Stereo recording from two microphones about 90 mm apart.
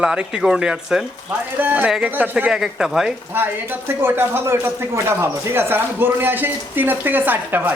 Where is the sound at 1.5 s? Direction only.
20° right (ahead or behind).